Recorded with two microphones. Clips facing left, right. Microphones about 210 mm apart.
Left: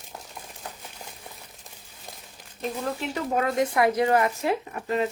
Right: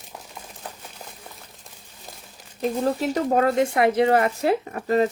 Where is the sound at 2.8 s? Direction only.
35° right (ahead or behind).